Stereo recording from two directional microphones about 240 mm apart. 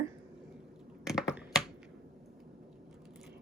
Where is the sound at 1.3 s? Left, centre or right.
Centre.